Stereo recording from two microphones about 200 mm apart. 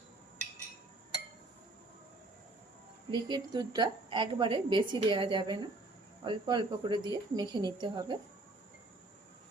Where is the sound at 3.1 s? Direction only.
20° right (ahead or behind).